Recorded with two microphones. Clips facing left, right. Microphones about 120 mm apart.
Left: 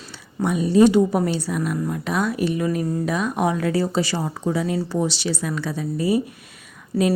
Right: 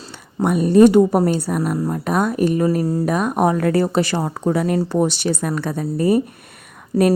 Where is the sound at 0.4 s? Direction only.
55° right (ahead or behind).